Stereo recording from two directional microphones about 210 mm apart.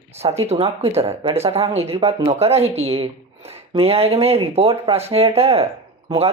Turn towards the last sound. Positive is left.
turn(degrees=-30)  # may be behind; listen again after turning